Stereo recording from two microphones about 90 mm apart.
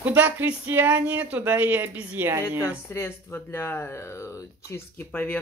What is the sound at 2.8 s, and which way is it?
Speech, 30° left (ahead or behind).